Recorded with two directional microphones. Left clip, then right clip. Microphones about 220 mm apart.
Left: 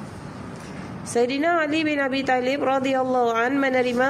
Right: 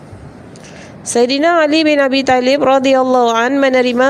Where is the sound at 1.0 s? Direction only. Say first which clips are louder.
Right 9 dB; 40° right (ahead or behind).